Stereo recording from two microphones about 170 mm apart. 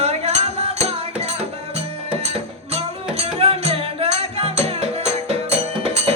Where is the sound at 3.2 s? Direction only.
35° right (ahead or behind).